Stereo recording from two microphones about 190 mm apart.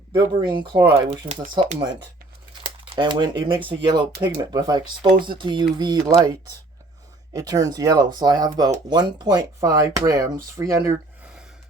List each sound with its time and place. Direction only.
0.1 s speech: 25° right (ahead or behind)
2.6 s a sound: 30° right (ahead or behind)
3.7 s speech: 25° right (ahead or behind)
7.3 s speech: 20° right (ahead or behind)